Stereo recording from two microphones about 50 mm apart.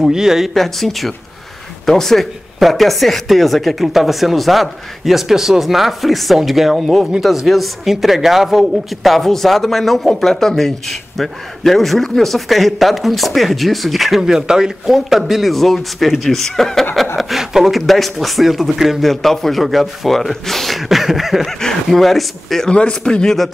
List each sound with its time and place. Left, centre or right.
0.0 s speech: centre
0.6 s a man's voice: centre
21.5 s a man's voice: centre
22.7 s speech: left